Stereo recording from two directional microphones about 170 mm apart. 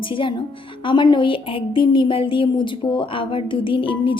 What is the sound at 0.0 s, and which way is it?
A woman's voice, 30° left (ahead or behind).